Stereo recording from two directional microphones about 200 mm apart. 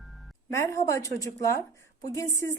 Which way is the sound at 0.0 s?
Centre (ahead or behind).